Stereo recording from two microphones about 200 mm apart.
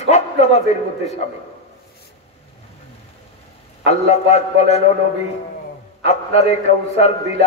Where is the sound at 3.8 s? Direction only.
35° left (ahead or behind).